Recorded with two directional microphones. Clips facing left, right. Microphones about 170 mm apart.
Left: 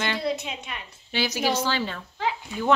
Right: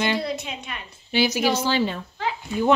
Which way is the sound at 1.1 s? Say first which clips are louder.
Right 4 dB; 10° right (ahead or behind).